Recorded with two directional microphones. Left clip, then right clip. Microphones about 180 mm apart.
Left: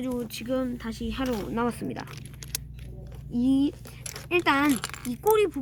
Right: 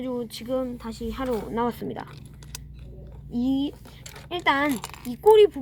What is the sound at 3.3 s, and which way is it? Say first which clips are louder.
A woman's voice: left 2 dB; 20° right (ahead or behind).